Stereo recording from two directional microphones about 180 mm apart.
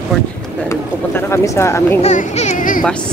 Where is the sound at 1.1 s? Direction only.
15° left (ahead or behind).